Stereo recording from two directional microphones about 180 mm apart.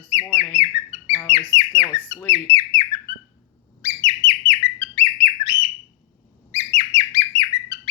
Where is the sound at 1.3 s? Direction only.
25° left (ahead or behind).